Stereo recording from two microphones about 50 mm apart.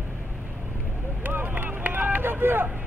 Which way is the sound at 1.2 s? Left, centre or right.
Right.